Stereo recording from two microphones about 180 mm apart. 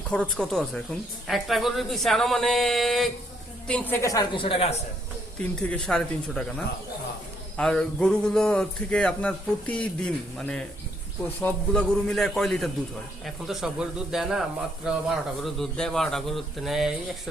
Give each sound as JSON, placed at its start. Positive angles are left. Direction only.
{"t": 0.1, "sound": "a woman's voice", "side_deg": 5}
{"t": 5.5, "sound": "speech", "side_deg": 5}
{"t": 7.5, "sound": "speech", "side_deg": 5}